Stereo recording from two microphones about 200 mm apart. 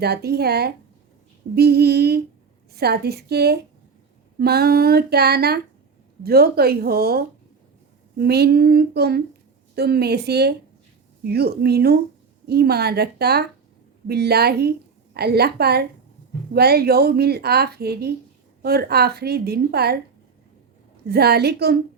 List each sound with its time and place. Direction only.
0.0 s a woman's voice: 50° right (ahead or behind)
21.1 s a woman's voice: 55° right (ahead or behind)